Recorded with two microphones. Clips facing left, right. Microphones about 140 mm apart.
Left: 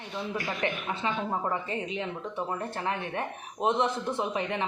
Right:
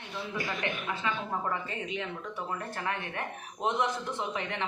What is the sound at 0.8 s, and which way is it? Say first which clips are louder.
Speech: left 3 dB; 25° left (ahead or behind).